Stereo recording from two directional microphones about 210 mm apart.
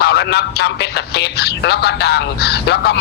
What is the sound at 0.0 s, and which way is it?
Speech, 50° left (ahead or behind).